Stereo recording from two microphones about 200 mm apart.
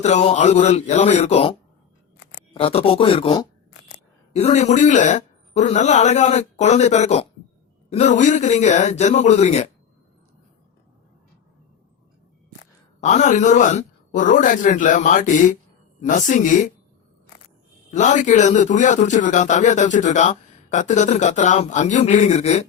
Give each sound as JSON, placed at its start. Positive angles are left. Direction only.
{"t": 0.0, "sound": "speech", "side_deg": 35}
{"t": 13.0, "sound": "speech", "side_deg": 35}
{"t": 17.9, "sound": "speech", "side_deg": 40}